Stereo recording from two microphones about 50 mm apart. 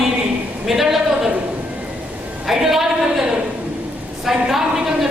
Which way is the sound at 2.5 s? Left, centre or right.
Centre.